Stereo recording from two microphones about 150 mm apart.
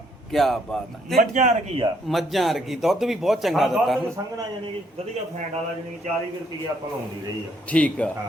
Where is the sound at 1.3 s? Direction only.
55° right (ahead or behind).